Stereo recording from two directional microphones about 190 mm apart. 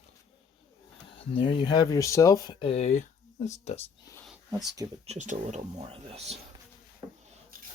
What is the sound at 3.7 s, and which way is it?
Speech, 10° left (ahead or behind).